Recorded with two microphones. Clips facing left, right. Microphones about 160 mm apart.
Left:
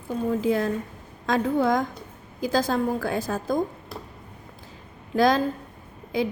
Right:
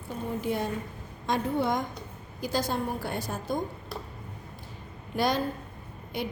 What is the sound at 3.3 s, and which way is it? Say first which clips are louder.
Speech: left 7 dB; 90° left.